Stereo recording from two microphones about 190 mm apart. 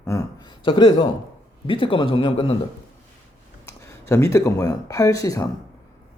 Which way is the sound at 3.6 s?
15° left (ahead or behind).